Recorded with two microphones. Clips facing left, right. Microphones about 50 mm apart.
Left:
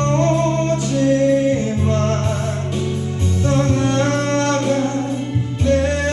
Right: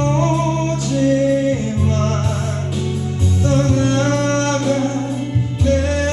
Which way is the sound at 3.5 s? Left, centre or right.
Centre.